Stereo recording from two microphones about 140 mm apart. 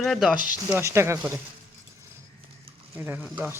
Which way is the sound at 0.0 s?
Centre (ahead or behind).